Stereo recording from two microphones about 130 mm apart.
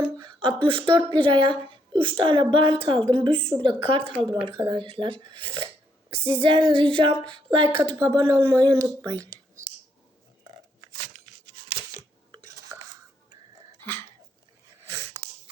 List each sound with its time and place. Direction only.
0.3 s a woman's voice: 40° right (ahead or behind)
6.2 s female singing: 40° right (ahead or behind)
7.9 s speech: 25° right (ahead or behind)
12.5 s cutlery: 25° right (ahead or behind)